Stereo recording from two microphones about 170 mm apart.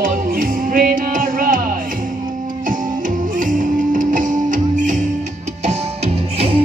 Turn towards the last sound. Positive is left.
turn(degrees=-40)  # may be behind; listen again after turning